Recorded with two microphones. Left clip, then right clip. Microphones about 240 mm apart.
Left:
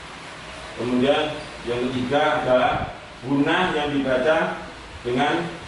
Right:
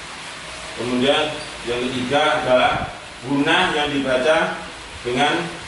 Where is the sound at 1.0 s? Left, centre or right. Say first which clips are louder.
Right 2 dB; centre.